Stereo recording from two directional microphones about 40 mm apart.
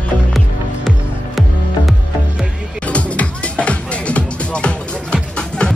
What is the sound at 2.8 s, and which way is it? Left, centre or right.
Music, left.